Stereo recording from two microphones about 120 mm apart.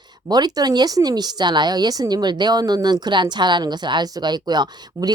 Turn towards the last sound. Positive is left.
turn(degrees=-35)  # may be behind; listen again after turning